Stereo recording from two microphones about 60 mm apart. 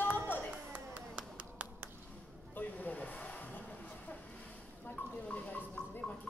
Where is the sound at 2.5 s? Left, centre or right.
Left.